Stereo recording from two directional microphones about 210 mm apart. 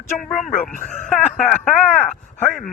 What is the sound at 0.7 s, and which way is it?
Speech, 35° left (ahead or behind).